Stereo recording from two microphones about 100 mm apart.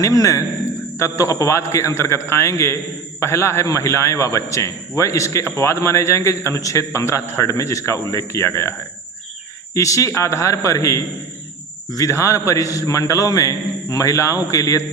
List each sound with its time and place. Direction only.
0.0 s a man's voice: 35° left (ahead or behind)
9.7 s a man's voice: 35° left (ahead or behind)